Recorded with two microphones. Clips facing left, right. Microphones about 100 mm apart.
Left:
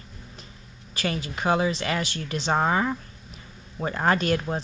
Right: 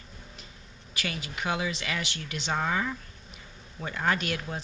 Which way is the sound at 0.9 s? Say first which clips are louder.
Left 6 dB; 35° left (ahead or behind).